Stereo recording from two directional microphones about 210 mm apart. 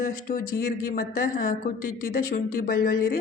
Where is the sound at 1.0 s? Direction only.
45° left (ahead or behind).